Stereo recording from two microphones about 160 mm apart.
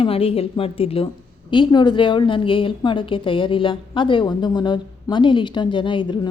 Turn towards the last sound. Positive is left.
turn(degrees=30)  # may be behind; listen again after turning